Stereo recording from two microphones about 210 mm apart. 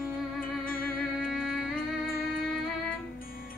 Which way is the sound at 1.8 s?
45° left (ahead or behind).